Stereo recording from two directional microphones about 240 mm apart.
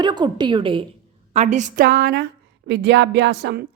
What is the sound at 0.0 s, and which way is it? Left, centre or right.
A woman's voice, centre.